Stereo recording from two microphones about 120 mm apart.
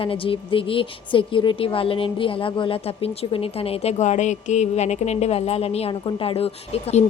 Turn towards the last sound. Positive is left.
turn(degrees=60)  # may be behind; listen again after turning